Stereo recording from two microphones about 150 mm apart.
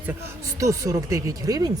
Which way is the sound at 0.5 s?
20° right (ahead or behind).